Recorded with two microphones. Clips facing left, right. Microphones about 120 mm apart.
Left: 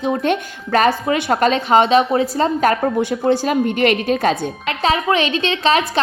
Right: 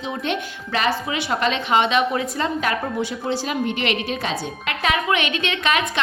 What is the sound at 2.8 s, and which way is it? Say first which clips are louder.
A woman's voice: left 8 dB; 55° left (ahead or behind).